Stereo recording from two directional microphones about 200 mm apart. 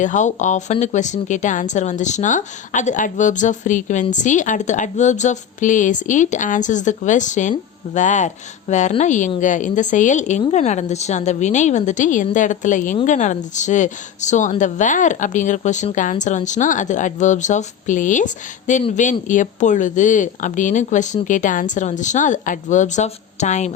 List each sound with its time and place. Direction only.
0.0 s speech: 40° left (ahead or behind)